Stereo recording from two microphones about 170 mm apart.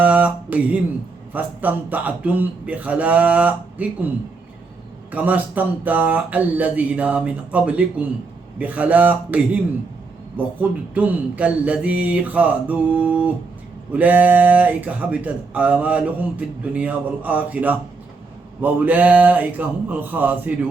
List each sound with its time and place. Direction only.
0.0 s a sound: 10° right (ahead or behind)
1.3 s speech: 10° right (ahead or behind)
5.1 s speech: 10° right (ahead or behind)